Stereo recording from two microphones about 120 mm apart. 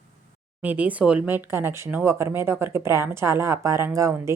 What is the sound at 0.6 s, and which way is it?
A woman's voice, 15° right (ahead or behind).